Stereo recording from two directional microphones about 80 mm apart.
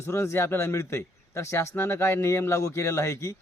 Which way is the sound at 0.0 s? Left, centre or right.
Left.